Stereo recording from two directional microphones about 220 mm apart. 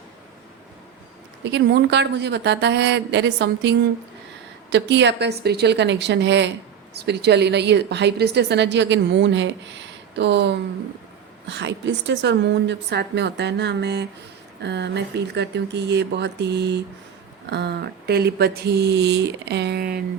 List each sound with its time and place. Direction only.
1.5 s a woman's voice: 50° right (ahead or behind)